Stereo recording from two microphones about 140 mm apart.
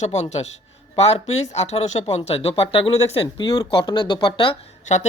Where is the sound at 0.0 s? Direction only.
55° left (ahead or behind); by 4.5 s 35° left (ahead or behind).